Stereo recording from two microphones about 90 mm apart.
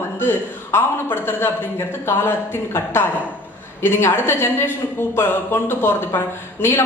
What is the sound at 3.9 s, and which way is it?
Speech, 25° left (ahead or behind).